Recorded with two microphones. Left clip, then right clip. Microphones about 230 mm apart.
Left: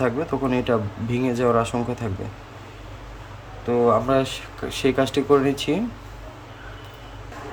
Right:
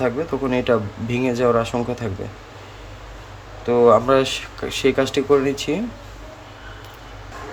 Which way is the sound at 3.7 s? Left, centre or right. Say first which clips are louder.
Right 5 dB; centre.